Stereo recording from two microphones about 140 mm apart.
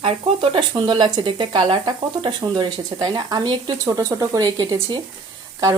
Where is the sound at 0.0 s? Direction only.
35° right (ahead or behind).